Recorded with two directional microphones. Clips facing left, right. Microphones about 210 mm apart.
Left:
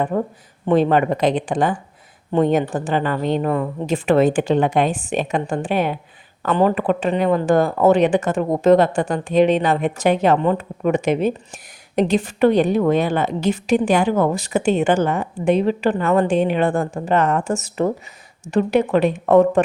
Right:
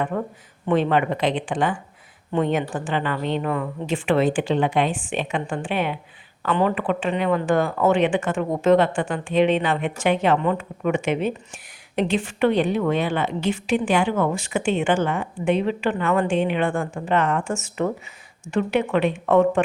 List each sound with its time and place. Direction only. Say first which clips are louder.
0.7 s speech: left 4 dB; 40° left (ahead or behind)